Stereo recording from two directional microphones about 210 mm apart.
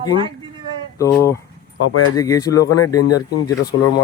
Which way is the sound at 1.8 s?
80° left.